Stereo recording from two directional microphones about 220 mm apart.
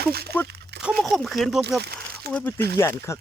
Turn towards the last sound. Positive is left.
turn(degrees=15)  # may be behind; listen again after turning